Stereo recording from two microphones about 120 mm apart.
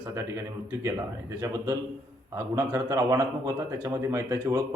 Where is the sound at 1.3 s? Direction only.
25° right (ahead or behind).